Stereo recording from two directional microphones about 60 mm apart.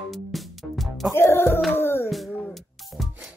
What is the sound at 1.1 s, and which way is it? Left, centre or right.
Music, left.